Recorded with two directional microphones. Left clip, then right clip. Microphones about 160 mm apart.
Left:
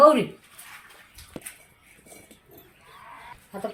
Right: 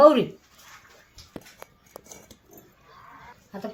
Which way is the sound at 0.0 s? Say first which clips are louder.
Even; 50° right (ahead or behind).